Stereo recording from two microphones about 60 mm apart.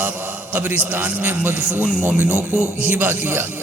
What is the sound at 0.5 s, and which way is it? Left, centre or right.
A man's voice, right.